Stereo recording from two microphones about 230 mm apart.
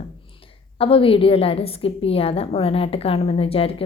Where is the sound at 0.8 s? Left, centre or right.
Left.